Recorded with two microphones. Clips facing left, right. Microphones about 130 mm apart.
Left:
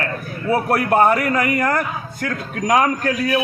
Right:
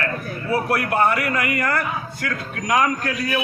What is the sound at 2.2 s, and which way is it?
A man's voice, 40° left (ahead or behind).